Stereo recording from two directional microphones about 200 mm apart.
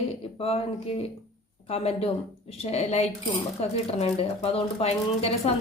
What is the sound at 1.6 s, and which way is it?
A woman's voice, 30° left (ahead or behind).